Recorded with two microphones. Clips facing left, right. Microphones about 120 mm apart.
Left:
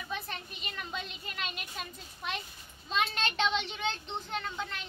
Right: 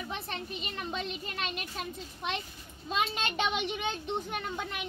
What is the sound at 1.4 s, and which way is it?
Speech, 25° right (ahead or behind).